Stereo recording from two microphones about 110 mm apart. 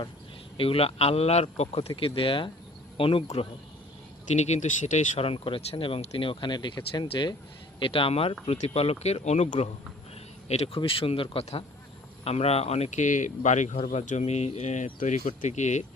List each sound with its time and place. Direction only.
0.5 s a man's voice: 60° left (ahead or behind)
2.0 s speech: 55° left (ahead or behind)
4.4 s a man's voice: 90° left; by 10.8 s 75° left (ahead or behind)
10.8 s speech: 55° left (ahead or behind); by 15.8 s 90° left